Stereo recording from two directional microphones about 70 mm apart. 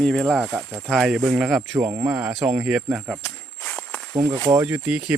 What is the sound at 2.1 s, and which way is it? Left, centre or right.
Speech, centre.